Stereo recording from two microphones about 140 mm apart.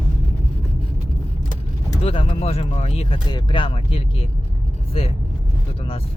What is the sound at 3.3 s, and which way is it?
Speech, 30° left (ahead or behind).